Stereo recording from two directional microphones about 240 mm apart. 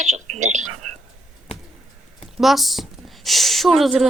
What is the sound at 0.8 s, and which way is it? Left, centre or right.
Whispering, right.